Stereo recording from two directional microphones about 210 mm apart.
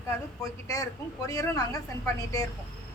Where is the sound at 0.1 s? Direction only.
15° left (ahead or behind).